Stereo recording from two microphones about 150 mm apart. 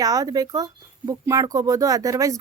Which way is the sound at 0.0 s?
25° right (ahead or behind).